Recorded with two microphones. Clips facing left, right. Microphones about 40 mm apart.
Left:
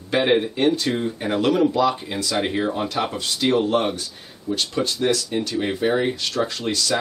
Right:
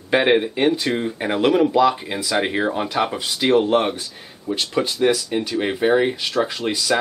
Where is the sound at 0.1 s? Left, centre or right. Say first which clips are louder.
Right 2 dB; centre.